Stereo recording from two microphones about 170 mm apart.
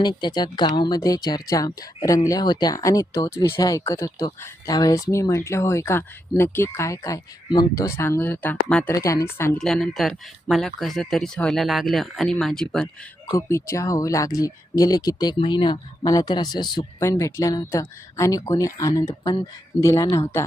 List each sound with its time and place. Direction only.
0.0 s speech: 25° left (ahead or behind); by 12.9 s 5° left (ahead or behind)
13.3 s speech: 15° left (ahead or behind)